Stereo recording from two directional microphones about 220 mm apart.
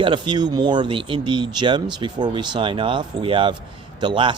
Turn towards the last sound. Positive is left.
turn(degrees=-20)  # may be behind; listen again after turning